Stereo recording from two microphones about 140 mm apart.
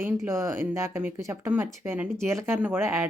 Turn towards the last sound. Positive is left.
turn(degrees=-20)  # may be behind; listen again after turning